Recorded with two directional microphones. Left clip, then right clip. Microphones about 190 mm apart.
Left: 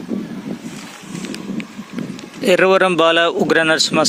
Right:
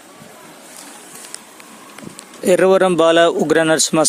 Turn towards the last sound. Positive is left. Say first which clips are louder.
# even
turn(degrees=-15)  # may be behind; listen again after turning